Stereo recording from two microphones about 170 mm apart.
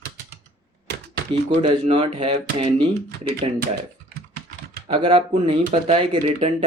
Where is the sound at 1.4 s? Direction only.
30° right (ahead or behind).